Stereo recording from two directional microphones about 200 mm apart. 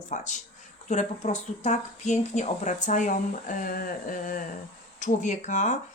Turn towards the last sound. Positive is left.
turn(degrees=40)  # may be behind; listen again after turning